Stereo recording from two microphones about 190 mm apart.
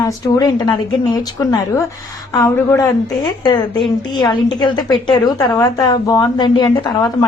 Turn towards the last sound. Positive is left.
turn(degrees=20)  # may be behind; listen again after turning